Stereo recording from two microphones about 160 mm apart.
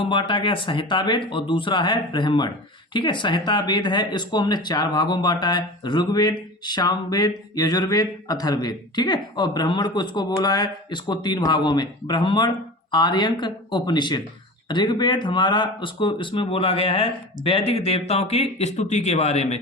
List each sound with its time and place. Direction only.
0.0 s speech: 30° left (ahead or behind)